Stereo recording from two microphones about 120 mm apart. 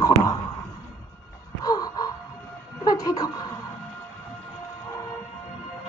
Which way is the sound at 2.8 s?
30° left (ahead or behind).